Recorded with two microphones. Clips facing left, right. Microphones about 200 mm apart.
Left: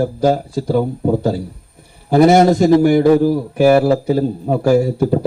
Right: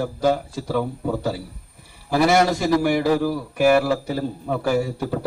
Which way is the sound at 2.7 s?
30° left (ahead or behind).